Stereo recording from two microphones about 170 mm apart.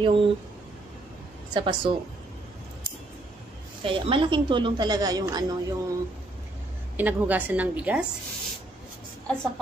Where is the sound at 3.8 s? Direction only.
30° right (ahead or behind).